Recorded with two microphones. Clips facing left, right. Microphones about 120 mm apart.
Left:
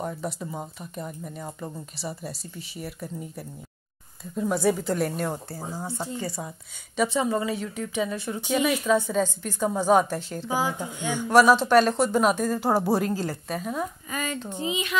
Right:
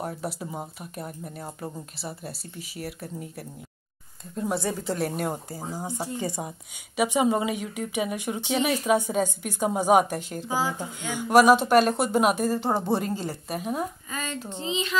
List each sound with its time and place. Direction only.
0.0 s speech: 5° right (ahead or behind)
10.5 s speech: 15° left (ahead or behind)
11.1 s speech: 10° right (ahead or behind)
12.5 s speech: 5° left (ahead or behind)
13.6 s speech: 15° right (ahead or behind)
14.1 s speech: 10° left (ahead or behind)